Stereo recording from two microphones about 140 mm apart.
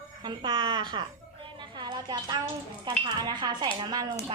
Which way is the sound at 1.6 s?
35° right (ahead or behind).